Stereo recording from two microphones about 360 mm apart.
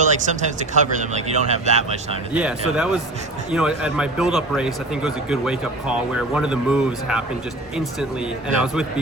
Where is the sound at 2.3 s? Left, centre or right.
Centre.